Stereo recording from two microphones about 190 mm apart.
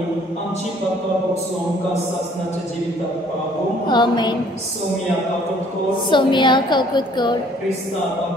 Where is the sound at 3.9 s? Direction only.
20° left (ahead or behind).